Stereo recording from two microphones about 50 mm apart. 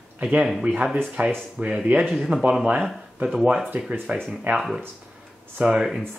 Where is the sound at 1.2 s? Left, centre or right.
Right.